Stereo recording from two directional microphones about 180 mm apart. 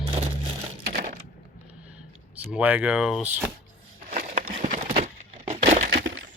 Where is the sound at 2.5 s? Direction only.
10° right (ahead or behind).